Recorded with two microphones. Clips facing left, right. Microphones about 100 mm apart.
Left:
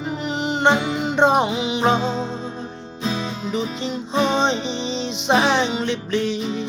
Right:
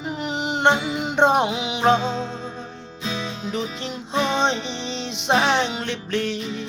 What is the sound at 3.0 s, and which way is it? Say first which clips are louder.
Music: left 3 dB; 45° left (ahead or behind).